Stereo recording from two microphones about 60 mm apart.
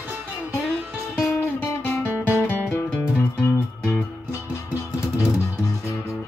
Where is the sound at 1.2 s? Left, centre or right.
Left.